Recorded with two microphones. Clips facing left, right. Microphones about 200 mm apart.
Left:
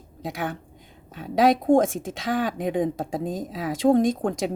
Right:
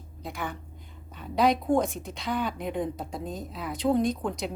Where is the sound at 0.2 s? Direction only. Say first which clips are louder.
Left 5 dB; 90° left.